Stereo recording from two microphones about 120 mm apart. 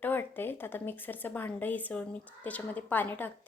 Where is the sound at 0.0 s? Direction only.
15° left (ahead or behind).